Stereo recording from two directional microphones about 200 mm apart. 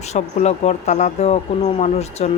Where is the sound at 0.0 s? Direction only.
35° left (ahead or behind).